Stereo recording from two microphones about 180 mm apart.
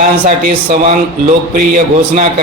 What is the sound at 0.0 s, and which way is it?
A man's voice, 45° right (ahead or behind).